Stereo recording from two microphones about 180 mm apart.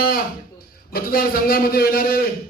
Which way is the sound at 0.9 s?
55° left (ahead or behind).